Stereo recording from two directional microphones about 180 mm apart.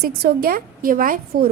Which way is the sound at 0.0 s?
60° right (ahead or behind).